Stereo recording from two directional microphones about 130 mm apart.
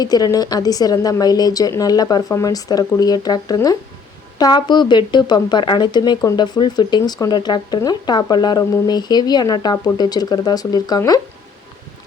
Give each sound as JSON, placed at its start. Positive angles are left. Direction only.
{"t": 0.0, "sound": "a woman's voice", "side_deg": 30}